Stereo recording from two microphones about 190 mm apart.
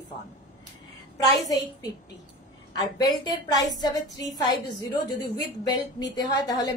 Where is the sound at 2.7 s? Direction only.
20° left (ahead or behind).